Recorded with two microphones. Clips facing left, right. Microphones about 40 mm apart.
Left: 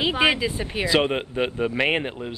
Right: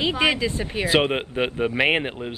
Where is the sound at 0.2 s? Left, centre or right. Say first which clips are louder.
Left 1 dB; centre.